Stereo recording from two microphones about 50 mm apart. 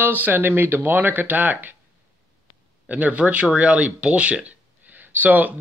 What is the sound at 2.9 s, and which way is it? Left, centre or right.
Speech, right.